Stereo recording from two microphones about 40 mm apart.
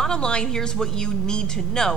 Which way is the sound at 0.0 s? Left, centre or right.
Left.